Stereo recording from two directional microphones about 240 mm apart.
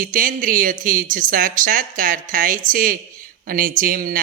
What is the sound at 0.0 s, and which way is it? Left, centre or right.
Speech, right.